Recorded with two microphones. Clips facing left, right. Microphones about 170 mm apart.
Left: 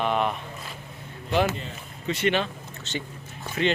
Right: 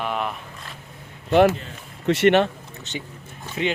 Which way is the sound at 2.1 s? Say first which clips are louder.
Right 8 dB; 75° right (ahead or behind).